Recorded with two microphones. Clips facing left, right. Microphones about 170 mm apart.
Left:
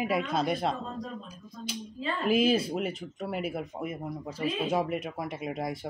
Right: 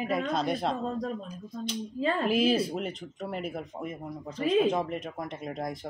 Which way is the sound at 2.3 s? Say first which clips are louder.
Left 4 dB; centre (ahead or behind).